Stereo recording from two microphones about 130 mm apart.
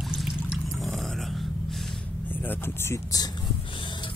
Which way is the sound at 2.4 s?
15° left (ahead or behind).